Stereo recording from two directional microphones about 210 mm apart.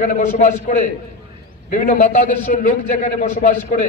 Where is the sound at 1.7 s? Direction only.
40° left (ahead or behind).